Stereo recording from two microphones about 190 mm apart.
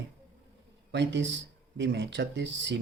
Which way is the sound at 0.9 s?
65° right (ahead or behind).